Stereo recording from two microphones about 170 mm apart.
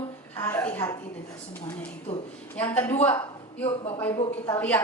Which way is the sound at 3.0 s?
10° left (ahead or behind).